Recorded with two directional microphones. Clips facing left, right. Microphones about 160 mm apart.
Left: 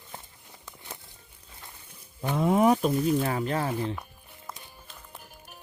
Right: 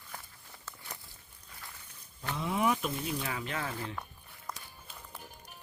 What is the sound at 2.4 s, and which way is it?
Speech, 45° left (ahead or behind).